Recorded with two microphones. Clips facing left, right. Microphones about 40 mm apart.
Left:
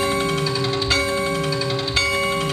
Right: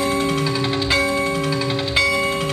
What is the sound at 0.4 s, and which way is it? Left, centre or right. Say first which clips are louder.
Music: right 1 dB; centre.